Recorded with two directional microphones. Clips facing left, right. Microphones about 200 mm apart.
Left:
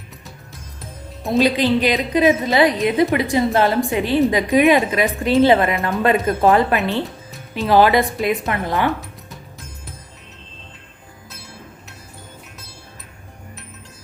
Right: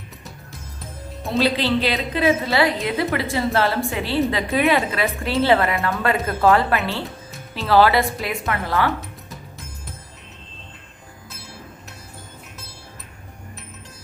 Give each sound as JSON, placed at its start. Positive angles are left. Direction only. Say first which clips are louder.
{"t": 1.3, "sound": "a woman's voice", "louder": "left 4 dB", "side_deg": 15}